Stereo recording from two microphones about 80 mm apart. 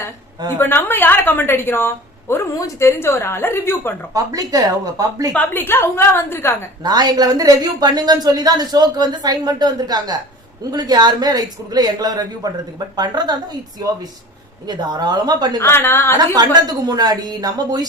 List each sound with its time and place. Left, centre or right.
0.6 s a woman's voice: left
4.1 s speech: right
5.3 s a woman's voice: left
6.8 s speech: right
13.0 s speech: right
15.6 s a woman's voice: left
16.1 s speech: right